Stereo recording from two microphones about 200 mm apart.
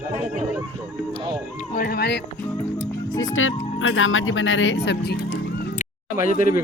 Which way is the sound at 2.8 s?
75° left (ahead or behind).